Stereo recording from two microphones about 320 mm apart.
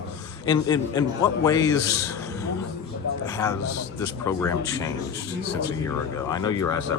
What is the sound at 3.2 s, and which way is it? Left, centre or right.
A man's voice, centre.